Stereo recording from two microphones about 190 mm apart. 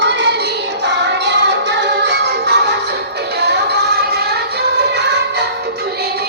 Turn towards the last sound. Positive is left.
turn(degrees=-60)  # may be behind; listen again after turning